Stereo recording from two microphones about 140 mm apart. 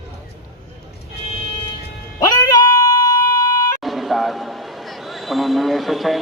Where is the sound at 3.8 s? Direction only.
Centre (ahead or behind).